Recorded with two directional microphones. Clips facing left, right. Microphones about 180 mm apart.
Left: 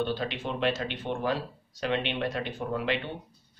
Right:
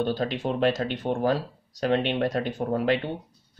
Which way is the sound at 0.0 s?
40° right (ahead or behind).